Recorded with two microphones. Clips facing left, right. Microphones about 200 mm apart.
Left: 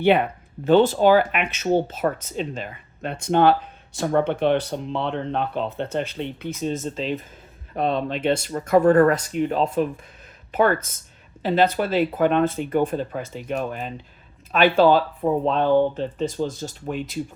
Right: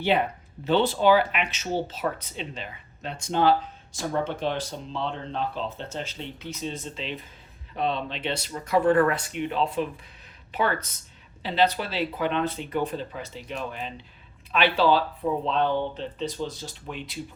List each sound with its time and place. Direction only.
0.6 s speech: 45° left (ahead or behind)